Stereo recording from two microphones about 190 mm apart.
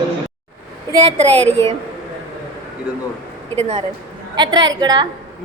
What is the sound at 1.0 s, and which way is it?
Speech, 30° right (ahead or behind).